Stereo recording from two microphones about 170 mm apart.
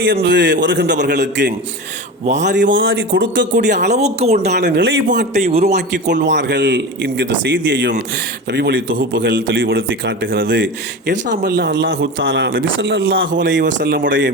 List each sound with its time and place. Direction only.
0.0 s speech: 90° right
2.2 s a man's voice: 45° right (ahead or behind)
2.5 s speech: 90° right
3.9 s speech: 40° right (ahead or behind)
4.5 s a man's voice: 85° right
5.0 s a man's voice: 50° right (ahead or behind)
5.6 s a man's voice: 80° right